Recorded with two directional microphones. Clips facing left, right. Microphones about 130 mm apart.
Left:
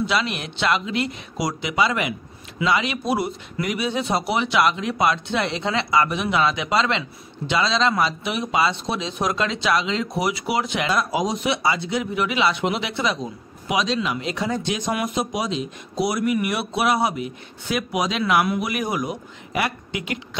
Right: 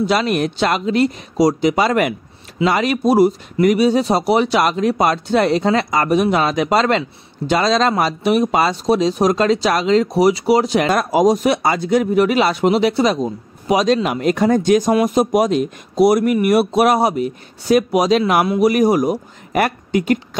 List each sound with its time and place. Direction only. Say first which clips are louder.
0.0 s speech: right 7 dB; 45° right (ahead or behind)